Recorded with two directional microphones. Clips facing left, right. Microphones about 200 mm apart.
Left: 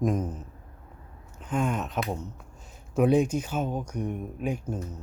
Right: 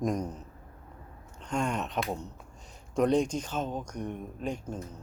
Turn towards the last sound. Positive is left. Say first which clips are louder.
# left 4 dB
turn(degrees=10)  # may be behind; listen again after turning